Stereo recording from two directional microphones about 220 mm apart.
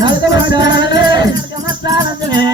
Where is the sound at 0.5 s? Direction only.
20° right (ahead or behind).